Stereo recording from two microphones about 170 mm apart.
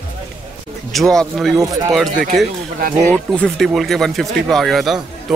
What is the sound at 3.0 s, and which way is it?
Speech, 10° left (ahead or behind).